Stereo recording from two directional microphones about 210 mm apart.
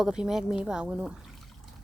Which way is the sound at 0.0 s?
5° right (ahead or behind).